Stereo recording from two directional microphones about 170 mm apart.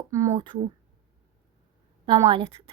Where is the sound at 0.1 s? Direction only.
20° right (ahead or behind).